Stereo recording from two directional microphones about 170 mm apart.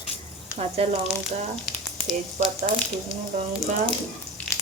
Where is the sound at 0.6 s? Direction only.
35° right (ahead or behind).